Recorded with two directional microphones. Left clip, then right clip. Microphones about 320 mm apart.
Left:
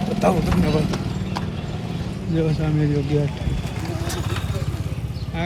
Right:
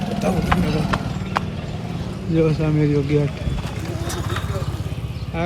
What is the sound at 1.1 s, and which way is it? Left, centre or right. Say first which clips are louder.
Vehicle: right 4 dB; centre.